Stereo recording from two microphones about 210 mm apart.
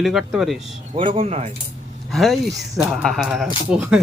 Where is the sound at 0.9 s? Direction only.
25° right (ahead or behind).